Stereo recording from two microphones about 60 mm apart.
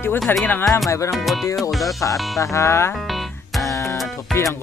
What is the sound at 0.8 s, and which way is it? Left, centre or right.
Music, left.